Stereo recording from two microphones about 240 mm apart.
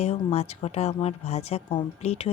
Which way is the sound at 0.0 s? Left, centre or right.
Left.